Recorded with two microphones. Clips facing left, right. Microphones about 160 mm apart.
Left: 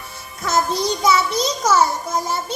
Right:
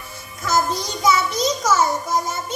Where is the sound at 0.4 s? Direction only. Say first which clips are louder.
Left 2 dB; 25° left (ahead or behind).